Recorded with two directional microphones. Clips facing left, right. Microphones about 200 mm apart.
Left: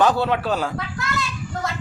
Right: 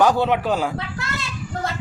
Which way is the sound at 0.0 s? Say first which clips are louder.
Right 1 dB; 15° right (ahead or behind).